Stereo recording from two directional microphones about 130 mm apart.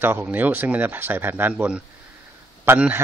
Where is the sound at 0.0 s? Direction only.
15° right (ahead or behind).